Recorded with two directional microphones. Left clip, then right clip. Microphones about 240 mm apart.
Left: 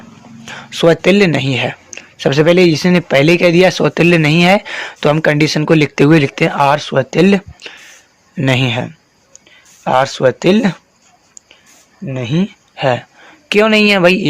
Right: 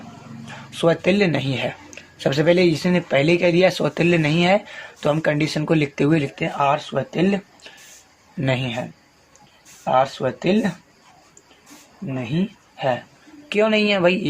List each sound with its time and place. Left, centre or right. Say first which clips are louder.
0.4 s speech: left 8 dB; left
12.1 s speech: left 7 dB; left
13.5 s speech: left 8 dB; left